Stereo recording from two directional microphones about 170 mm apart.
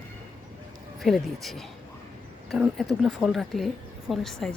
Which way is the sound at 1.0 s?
Centre (ahead or behind).